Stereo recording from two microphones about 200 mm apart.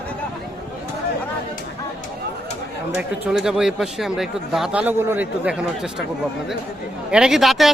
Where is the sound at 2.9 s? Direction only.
5° right (ahead or behind).